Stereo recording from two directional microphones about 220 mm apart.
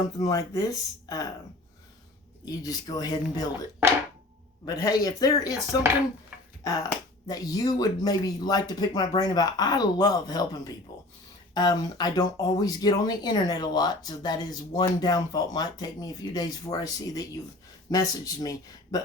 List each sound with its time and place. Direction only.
0.0 s speech: 15° left (ahead or behind)
2.4 s speech: 15° left (ahead or behind)
4.6 s speech: 15° left (ahead or behind)
6.7 s speech: 15° left (ahead or behind)